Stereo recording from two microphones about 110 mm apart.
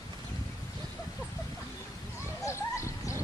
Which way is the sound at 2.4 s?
25° left (ahead or behind).